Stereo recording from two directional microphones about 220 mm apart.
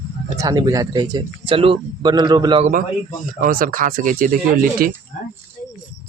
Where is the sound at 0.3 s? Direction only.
15° right (ahead or behind).